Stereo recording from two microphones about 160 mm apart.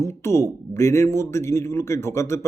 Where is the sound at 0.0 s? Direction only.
15° left (ahead or behind).